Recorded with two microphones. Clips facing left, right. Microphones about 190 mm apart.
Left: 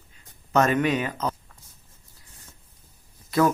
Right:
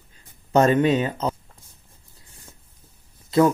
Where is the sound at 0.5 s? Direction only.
30° right (ahead or behind).